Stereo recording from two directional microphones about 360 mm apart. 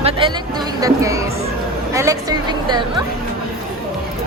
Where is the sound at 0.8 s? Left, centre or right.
Centre.